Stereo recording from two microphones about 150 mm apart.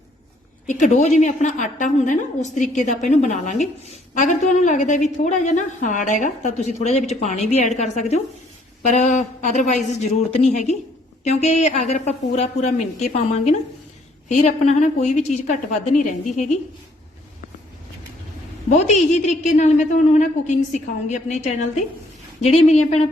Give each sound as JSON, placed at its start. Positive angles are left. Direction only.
{"t": 0.7, "sound": "a woman's voice", "side_deg": 55}
{"t": 18.8, "sound": "a woman's voice", "side_deg": 50}